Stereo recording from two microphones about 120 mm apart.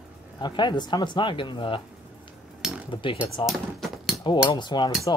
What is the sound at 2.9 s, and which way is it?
Speech, 45° left (ahead or behind).